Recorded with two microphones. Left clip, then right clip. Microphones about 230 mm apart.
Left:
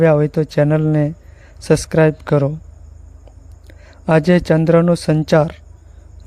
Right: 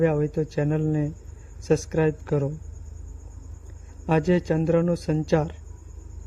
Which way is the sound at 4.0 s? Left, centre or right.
Left.